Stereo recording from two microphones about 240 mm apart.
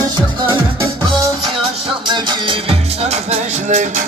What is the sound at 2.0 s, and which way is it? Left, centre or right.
Music, centre.